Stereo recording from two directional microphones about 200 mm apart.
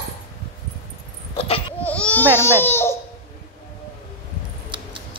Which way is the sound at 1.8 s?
5° left (ahead or behind).